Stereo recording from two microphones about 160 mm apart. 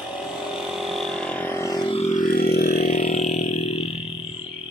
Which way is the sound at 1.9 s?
45° left (ahead or behind).